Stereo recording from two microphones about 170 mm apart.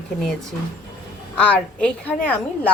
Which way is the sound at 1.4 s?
10° left (ahead or behind).